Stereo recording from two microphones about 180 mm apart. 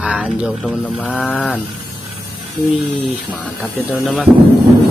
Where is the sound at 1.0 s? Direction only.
5° left (ahead or behind).